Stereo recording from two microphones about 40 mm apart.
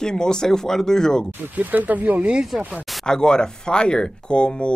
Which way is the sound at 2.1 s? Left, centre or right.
Right.